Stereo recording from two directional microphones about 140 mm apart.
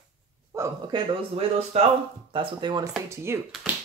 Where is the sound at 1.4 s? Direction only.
45° right (ahead or behind).